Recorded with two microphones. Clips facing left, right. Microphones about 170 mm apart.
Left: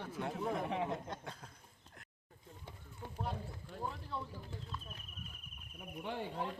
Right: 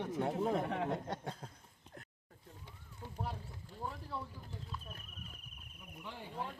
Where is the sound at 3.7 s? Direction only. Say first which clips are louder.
Left 1 dB; 70° left (ahead or behind).